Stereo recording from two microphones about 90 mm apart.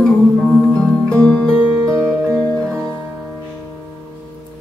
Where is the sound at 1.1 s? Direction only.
10° left (ahead or behind).